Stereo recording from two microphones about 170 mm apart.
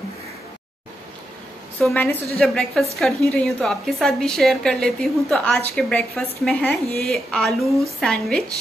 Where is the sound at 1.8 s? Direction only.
10° left (ahead or behind).